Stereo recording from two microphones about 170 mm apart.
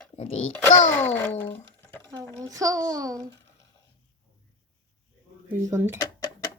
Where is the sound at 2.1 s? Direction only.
20° right (ahead or behind).